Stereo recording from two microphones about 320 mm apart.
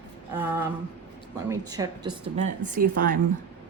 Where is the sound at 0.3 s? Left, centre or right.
Centre.